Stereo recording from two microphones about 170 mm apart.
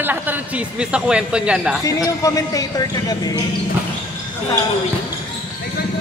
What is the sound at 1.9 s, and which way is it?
Speech, 20° left (ahead or behind).